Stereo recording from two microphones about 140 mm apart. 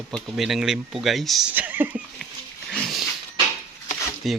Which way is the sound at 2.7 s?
5° left (ahead or behind).